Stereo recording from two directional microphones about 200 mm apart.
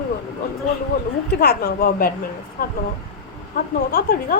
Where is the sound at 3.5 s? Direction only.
45° left (ahead or behind).